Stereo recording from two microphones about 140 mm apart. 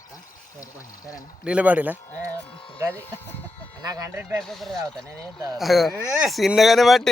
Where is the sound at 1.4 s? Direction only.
10° right (ahead or behind).